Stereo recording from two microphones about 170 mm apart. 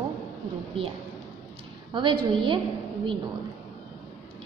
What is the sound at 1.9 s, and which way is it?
Speech, 30° right (ahead or behind).